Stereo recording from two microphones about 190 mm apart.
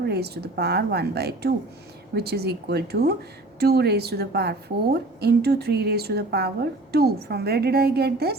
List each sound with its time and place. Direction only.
0.0 s a woman's voice: 60° right (ahead or behind)